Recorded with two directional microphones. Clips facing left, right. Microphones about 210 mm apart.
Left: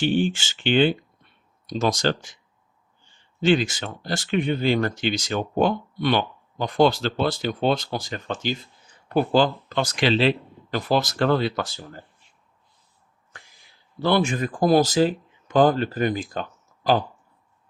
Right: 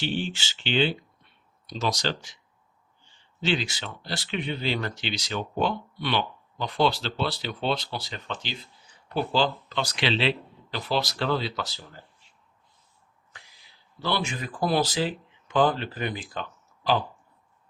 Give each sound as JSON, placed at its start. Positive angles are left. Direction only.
{"t": 0.0, "sound": "speech", "side_deg": 50}
{"t": 3.4, "sound": "speech", "side_deg": 50}
{"t": 13.3, "sound": "a sound", "side_deg": 50}
{"t": 14.0, "sound": "speech", "side_deg": 50}